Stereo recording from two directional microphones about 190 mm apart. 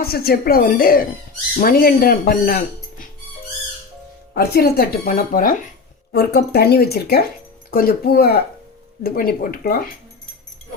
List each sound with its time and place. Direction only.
0.0 s speech: 55° left (ahead or behind)
4.4 s speech: 55° left (ahead or behind)
6.1 s speech: 55° left (ahead or behind)